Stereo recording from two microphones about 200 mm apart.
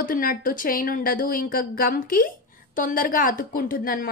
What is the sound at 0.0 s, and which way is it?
A woman's voice, 45° left (ahead or behind).